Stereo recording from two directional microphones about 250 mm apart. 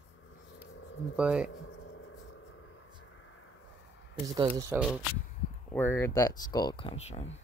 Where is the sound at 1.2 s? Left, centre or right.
Centre.